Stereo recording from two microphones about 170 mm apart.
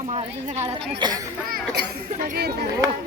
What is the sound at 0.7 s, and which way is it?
Speech, 25° right (ahead or behind).